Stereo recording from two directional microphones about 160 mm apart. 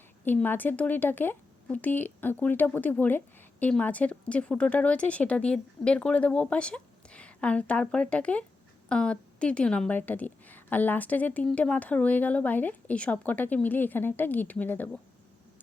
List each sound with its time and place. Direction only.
0.3 s speech: 10° left (ahead or behind)